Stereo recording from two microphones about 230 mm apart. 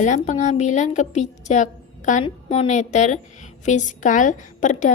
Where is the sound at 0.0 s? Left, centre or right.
Left.